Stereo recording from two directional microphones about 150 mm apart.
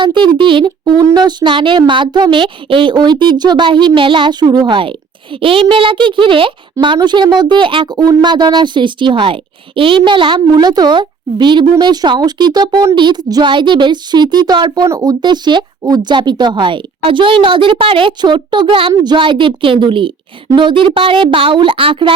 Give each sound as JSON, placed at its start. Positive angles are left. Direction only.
{"t": 0.0, "sound": "speech", "side_deg": -30}